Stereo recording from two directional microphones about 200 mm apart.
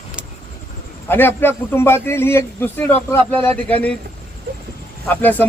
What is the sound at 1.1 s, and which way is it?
A man's voice, 10° left (ahead or behind).